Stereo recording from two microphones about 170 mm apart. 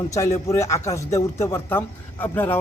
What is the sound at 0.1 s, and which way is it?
Speech, 20° left (ahead or behind).